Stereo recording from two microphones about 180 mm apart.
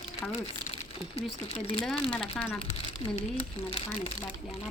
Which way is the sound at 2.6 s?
30° left (ahead or behind).